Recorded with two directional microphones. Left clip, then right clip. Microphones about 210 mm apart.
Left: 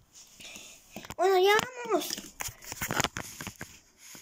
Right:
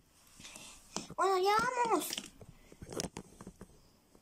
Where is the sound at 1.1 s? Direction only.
25° right (ahead or behind).